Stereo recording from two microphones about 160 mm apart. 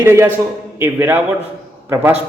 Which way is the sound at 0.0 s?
15° right (ahead or behind).